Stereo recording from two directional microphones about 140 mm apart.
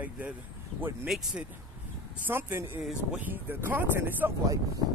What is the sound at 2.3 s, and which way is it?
Speech, 15° right (ahead or behind).